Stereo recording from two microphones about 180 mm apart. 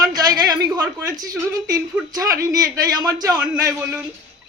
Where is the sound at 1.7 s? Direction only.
20° right (ahead or behind).